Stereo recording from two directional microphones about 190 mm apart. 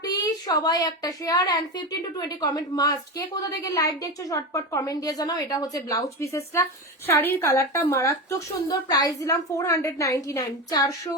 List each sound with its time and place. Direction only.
0.0 s a woman's voice: 20° left (ahead or behind)